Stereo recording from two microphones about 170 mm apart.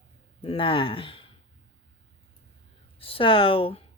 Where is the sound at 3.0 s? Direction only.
30° left (ahead or behind).